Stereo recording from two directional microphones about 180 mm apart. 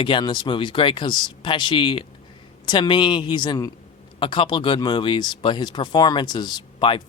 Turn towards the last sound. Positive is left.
turn(degrees=25)  # may be behind; listen again after turning